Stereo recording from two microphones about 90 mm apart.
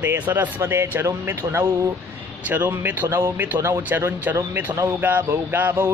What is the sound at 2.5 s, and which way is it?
Speech, 20° right (ahead or behind).